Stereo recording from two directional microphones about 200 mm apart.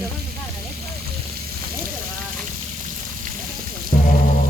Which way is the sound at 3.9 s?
35° left (ahead or behind).